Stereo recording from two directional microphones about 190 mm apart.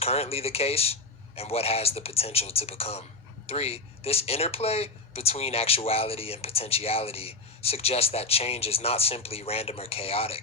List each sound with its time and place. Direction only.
0.0 s speech: 30° left (ahead or behind)